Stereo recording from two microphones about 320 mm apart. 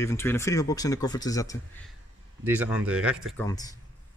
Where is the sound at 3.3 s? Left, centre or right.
Centre.